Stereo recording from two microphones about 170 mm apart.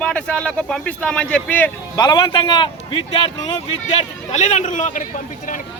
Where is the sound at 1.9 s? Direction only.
25° left (ahead or behind).